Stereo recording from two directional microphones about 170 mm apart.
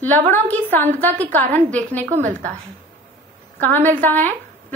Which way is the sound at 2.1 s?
45° right (ahead or behind).